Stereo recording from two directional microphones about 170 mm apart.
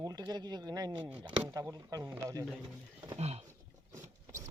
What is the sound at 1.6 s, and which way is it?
Speech, 20° right (ahead or behind).